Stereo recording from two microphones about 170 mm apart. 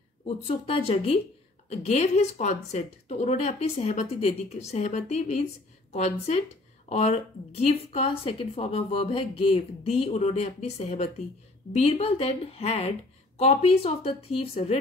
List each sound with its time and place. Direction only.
0.5 s a woman's voice: 35° left (ahead or behind)